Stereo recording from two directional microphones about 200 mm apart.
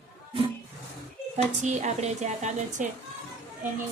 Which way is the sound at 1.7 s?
35° right (ahead or behind).